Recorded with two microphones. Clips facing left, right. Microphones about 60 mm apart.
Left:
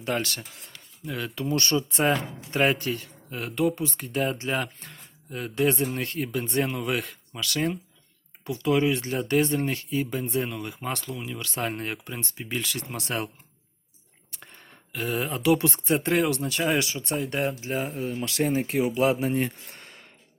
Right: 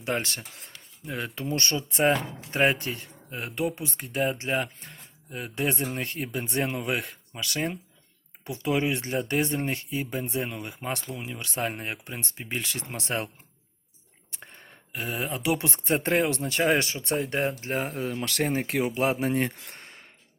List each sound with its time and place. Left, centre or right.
0.0 s speech: right
4.1 s speech: centre
5.8 s speech: right
14.3 s a sound: right
14.9 s speech: centre
15.9 s speech: right
17.7 s speech: right
18.0 s speech: right
18.7 s speech: right
18.9 s speech: right
19.3 s speech: right